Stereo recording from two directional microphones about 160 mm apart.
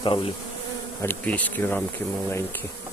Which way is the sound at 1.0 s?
10° left (ahead or behind).